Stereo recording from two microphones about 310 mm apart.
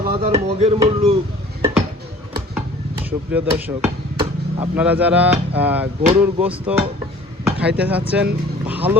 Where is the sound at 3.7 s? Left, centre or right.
Centre.